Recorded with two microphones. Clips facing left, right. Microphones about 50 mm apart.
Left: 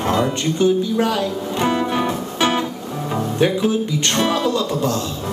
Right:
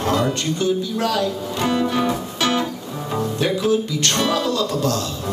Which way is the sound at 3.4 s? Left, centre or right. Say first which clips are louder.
Left 2 dB; centre.